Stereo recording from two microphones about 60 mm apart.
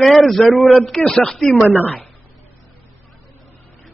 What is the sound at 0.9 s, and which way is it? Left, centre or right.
Speech, centre.